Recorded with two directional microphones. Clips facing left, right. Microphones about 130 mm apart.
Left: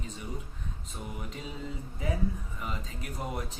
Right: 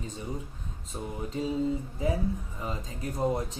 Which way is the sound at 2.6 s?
30° right (ahead or behind).